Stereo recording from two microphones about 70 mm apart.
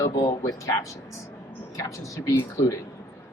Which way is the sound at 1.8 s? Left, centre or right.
Left.